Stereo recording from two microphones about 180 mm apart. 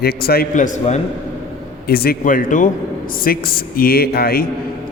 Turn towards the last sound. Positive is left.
turn(degrees=60)  # may be behind; listen again after turning